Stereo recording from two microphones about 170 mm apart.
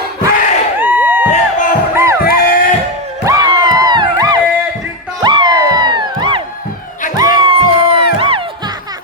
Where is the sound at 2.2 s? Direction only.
60° left (ahead or behind).